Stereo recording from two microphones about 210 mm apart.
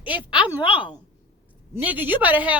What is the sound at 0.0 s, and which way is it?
Speech, 10° right (ahead or behind).